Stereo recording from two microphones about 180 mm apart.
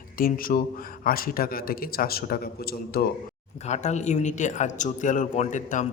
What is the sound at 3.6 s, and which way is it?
A man's voice, 40° left (ahead or behind).